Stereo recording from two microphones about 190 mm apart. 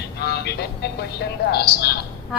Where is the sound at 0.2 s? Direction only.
60° left (ahead or behind).